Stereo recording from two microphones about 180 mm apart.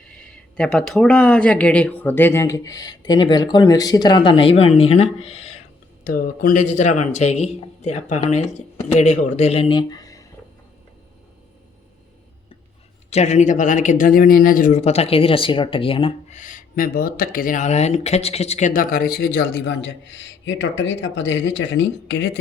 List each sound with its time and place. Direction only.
0.0 s speech: 5° left (ahead or behind); by 5.5 s 35° left (ahead or behind)
6.1 s speech: 55° left (ahead or behind); by 10.2 s 20° left (ahead or behind)
13.1 s speech: 40° left (ahead or behind)
16.3 s speech: 45° left (ahead or behind)
18.7 s a man's voice: 50° left (ahead or behind); by 22.4 s 75° left (ahead or behind)